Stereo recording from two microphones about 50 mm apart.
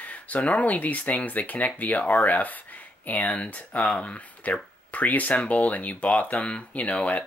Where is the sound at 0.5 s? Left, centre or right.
Left.